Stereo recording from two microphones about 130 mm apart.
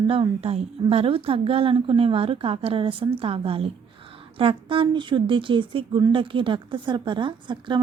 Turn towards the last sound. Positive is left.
turn(degrees=-35)  # may be behind; listen again after turning